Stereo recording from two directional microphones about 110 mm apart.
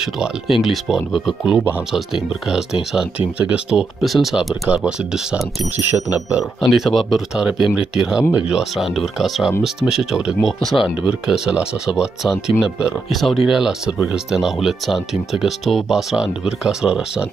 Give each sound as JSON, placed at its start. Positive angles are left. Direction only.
{"t": 0.0, "sound": "speech", "side_deg": -5}
{"t": 5.8, "sound": "speech", "side_deg": -20}
{"t": 6.6, "sound": "speech", "side_deg": 0}